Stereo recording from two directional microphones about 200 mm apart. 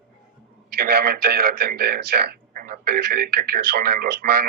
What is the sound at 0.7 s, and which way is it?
A man's voice, 50° right (ahead or behind).